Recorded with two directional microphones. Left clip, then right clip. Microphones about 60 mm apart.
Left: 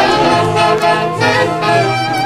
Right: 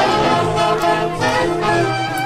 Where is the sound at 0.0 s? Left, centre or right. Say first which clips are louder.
Left 4 dB; left.